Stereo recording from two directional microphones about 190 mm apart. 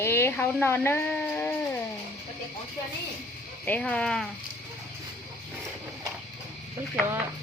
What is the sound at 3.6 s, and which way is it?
Speech, 5° left (ahead or behind).